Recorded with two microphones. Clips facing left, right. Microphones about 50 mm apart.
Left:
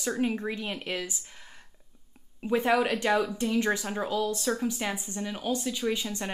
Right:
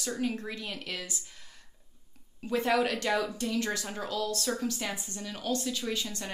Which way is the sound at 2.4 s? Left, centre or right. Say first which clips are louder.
Left 3 dB; left.